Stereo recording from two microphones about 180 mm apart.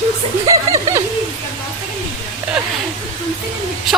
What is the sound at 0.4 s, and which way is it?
Chuckle, 20° right (ahead or behind).